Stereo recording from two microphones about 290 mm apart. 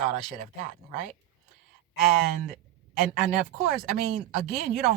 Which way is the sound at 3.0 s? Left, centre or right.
Centre.